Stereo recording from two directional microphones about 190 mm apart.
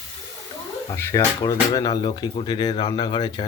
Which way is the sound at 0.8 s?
15° left (ahead or behind).